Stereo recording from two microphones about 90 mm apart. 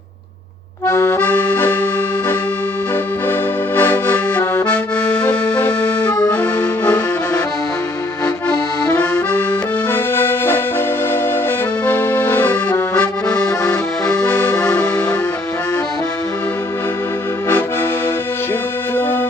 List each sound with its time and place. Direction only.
0.9 s accordion: 30° left (ahead or behind)
3.8 s accordion: 25° left (ahead or behind)
8.9 s accordion: 20° left (ahead or behind)